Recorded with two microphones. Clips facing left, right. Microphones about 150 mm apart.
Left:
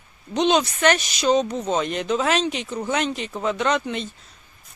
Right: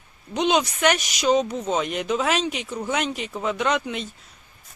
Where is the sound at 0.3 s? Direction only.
10° right (ahead or behind).